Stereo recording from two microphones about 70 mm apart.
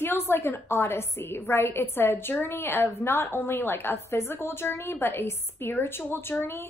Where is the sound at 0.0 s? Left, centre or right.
Left.